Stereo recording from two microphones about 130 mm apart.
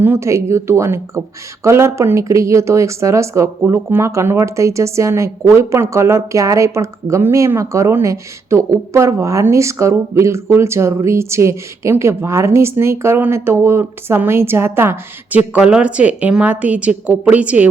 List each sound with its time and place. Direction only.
0.0 s a woman's voice: 20° right (ahead or behind)